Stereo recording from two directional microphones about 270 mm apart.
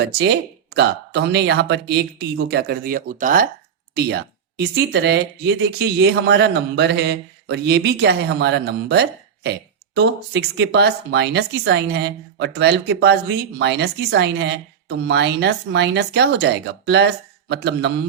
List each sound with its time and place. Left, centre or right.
0.0 s speech: right